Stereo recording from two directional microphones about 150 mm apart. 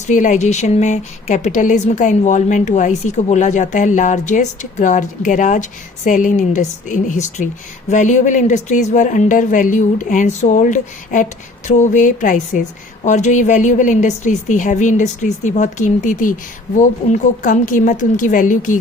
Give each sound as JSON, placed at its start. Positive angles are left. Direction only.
{"t": 0.1, "sound": "a woman's voice", "side_deg": 55}